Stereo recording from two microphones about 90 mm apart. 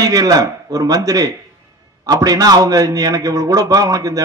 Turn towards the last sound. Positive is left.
turn(degrees=-40)  # may be behind; listen again after turning